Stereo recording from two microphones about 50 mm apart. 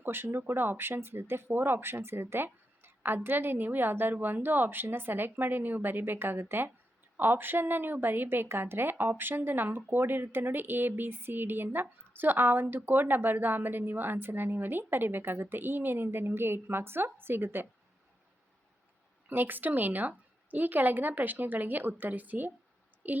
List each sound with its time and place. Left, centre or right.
0.0 s speech: right
19.3 s a woman's voice: right